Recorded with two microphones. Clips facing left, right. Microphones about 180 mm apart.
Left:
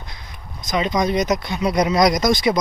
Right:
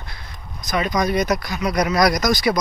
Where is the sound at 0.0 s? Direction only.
20° left (ahead or behind).